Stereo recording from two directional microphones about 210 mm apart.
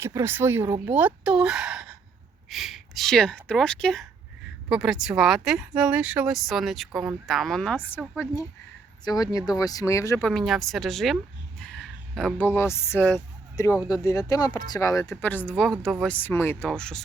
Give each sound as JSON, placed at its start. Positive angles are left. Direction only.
{"t": 0.0, "sound": "a woman's voice", "side_deg": -10}
{"t": 10.2, "sound": "speech", "side_deg": 0}